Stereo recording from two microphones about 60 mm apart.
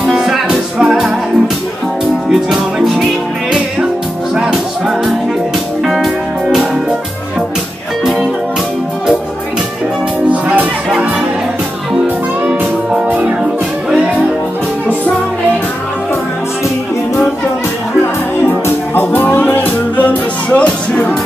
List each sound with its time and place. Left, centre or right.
0.0 s music: centre
2.2 s music: centre
4.4 s music: centre
8.0 s music: centre
13.4 s music: centre
18.9 s music: left; by 21.2 s centre